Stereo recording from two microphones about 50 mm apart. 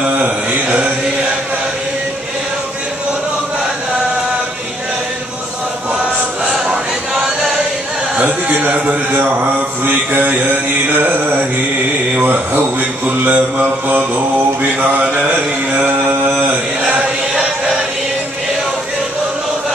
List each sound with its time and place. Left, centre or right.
0.2 s mantra: right
8.2 s mantra: right
12.5 s mantra: right
14.8 s mantra: right
16.3 s mantra: right